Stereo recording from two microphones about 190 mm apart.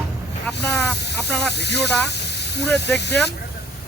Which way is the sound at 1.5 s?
60° left (ahead or behind).